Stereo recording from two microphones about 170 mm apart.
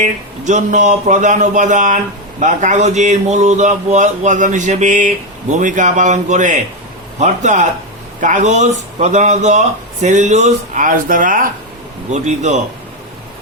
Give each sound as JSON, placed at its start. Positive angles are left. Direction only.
{"t": 0.0, "sound": "a man's voice", "side_deg": -45}